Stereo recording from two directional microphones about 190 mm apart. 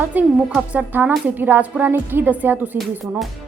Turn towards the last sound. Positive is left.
turn(degrees=0)  # may be behind; listen again after turning